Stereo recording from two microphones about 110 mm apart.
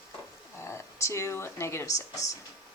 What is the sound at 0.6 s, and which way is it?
Speech, 25° left (ahead or behind).